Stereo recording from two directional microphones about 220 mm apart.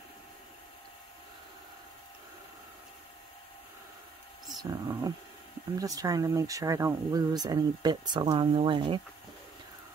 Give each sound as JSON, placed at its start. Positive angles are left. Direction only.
{"t": 4.6, "sound": "speech", "side_deg": -15}